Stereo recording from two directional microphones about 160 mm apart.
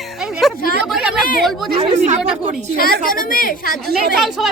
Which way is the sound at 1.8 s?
45° right (ahead or behind).